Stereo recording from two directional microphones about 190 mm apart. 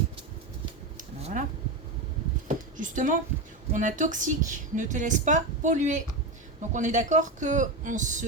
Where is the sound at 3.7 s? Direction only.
40° right (ahead or behind).